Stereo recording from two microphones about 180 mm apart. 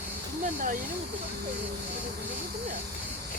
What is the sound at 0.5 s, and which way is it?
Speech, 50° right (ahead or behind).